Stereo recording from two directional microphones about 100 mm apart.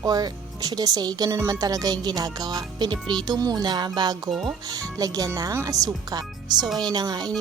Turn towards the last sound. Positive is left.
turn(degrees=-45)  # may be behind; listen again after turning